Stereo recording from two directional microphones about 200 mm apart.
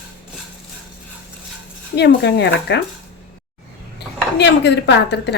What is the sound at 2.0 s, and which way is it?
Speech, 55° left (ahead or behind).